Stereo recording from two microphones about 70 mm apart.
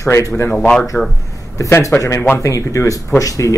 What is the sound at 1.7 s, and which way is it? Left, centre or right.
Speech, left.